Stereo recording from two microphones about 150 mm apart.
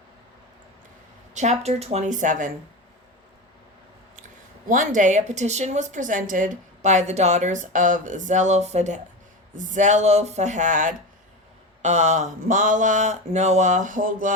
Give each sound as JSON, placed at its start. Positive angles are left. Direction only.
{"t": 1.3, "sound": "a woman's voice", "side_deg": -50}
{"t": 4.7, "sound": "a woman's voice", "side_deg": -60}